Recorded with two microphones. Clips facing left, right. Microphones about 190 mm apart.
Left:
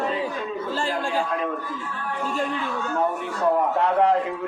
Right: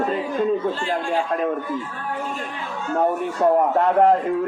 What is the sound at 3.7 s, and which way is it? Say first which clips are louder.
Speech: right 4 dB; 50° right (ahead or behind).